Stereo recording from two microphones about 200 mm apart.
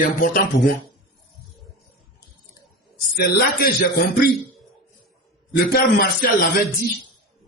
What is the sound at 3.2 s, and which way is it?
Speech, 50° left (ahead or behind).